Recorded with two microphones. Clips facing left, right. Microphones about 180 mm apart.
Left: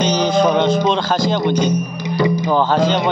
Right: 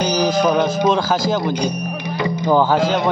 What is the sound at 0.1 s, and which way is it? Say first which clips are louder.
Music: even; 5° right (ahead or behind).